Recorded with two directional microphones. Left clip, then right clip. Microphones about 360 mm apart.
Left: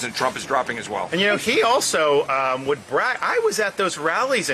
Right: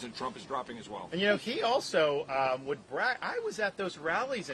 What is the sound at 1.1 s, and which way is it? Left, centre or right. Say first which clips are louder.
Speech: left 10 dB; right.